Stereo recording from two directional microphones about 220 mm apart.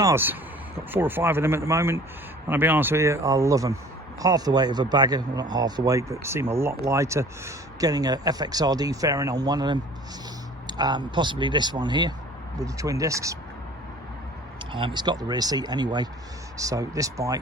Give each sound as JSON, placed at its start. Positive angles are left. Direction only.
{"t": 0.0, "sound": "speech", "side_deg": -10}
{"t": 14.7, "sound": "speech", "side_deg": -25}